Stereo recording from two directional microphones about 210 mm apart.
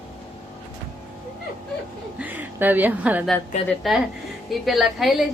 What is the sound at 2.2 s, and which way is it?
A woman's voice, 10° right (ahead or behind).